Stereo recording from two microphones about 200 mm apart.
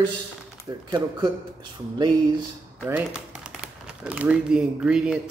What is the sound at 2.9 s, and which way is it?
Speech, 5° right (ahead or behind).